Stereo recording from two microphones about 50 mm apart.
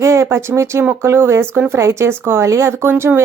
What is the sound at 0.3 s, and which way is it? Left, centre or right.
Speech, right.